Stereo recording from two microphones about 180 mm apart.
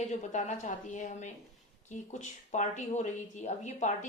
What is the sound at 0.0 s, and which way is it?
Speech, 45° left (ahead or behind).